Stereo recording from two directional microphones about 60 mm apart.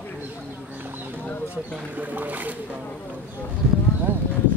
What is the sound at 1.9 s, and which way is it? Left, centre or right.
Speech, right.